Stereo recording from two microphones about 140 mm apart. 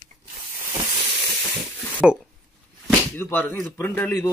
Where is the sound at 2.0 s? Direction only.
5° right (ahead or behind).